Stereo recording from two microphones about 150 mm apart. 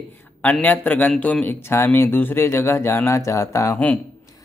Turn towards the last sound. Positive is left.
turn(degrees=10)  # may be behind; listen again after turning